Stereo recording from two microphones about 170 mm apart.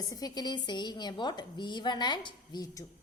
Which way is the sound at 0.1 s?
20° left (ahead or behind).